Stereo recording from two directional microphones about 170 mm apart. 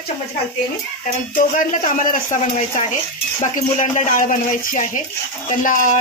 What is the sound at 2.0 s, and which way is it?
Speech, 50° left (ahead or behind).